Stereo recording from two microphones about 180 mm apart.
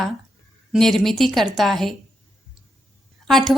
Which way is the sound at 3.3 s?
Centre (ahead or behind).